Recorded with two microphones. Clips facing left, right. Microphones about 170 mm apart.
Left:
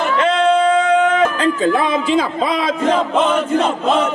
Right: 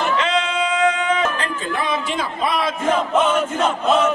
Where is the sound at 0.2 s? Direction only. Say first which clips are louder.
Left 7 dB; 55° left (ahead or behind).